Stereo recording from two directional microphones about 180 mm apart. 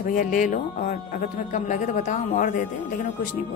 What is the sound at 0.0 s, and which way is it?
A woman's voice, 50° left (ahead or behind).